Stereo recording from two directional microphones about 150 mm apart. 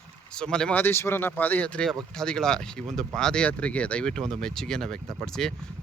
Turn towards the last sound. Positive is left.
turn(degrees=5)  # may be behind; listen again after turning